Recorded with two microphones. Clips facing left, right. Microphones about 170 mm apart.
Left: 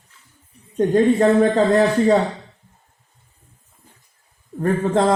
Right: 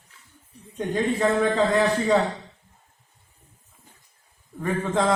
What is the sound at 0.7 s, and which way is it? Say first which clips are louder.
A man's voice: left 9 dB; 40° left (ahead or behind).